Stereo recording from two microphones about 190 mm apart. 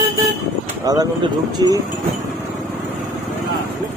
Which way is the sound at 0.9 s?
20° right (ahead or behind).